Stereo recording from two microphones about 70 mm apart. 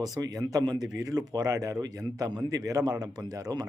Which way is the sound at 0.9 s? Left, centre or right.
Right.